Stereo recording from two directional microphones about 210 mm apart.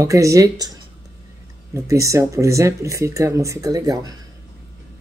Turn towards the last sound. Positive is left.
turn(degrees=-15)  # may be behind; listen again after turning